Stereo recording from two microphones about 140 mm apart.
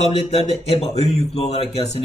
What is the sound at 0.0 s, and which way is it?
Speech, 50° left (ahead or behind).